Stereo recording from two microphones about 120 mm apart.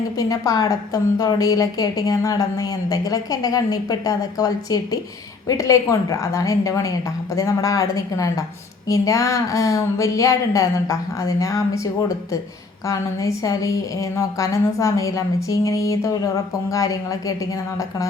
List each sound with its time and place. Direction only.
0.2 s a woman's voice: 30° left (ahead or behind)